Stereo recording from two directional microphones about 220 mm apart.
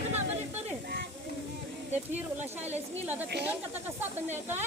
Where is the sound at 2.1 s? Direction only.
10° right (ahead or behind).